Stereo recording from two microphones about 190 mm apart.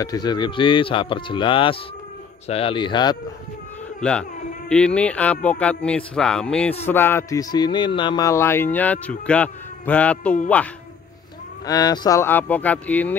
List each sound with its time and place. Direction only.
0.0 s speech: 20° left (ahead or behind)
4.0 s a man's voice: 5° left (ahead or behind)
11.6 s a man's voice: 20° left (ahead or behind)